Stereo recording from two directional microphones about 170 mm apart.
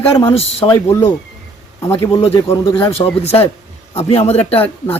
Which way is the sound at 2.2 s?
35° left (ahead or behind).